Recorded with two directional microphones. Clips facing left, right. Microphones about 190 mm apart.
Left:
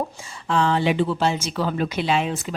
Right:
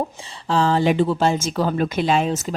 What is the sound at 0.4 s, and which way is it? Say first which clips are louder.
Speech: right 2 dB; 35° right (ahead or behind).